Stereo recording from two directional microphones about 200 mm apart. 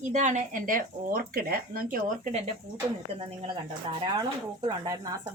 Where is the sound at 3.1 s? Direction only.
25° right (ahead or behind).